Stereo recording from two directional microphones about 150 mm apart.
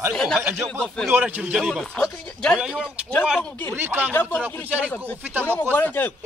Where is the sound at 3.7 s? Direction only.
15° right (ahead or behind).